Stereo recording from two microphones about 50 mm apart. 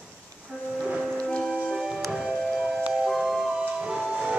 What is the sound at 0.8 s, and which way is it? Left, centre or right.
Music, centre.